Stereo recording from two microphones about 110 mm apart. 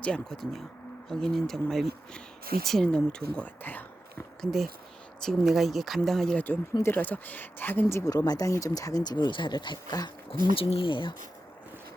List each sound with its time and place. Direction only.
0.0 s speech: 5° left (ahead or behind)
4.4 s speech: centre (ahead or behind)
6.8 s speech: 15° left (ahead or behind); by 10.1 s 35° left (ahead or behind)
10.5 s speech: 55° left (ahead or behind)